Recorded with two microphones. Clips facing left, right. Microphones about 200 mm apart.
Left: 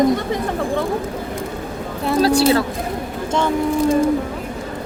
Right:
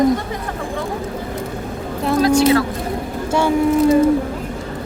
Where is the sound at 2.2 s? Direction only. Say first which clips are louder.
Right 2 dB; 30° left (ahead or behind).